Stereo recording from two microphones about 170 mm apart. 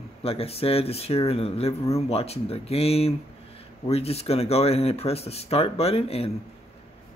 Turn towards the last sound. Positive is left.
turn(degrees=35)  # may be behind; listen again after turning